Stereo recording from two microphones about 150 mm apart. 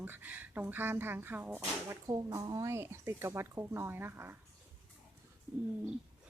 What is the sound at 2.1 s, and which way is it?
Speech, 25° right (ahead or behind).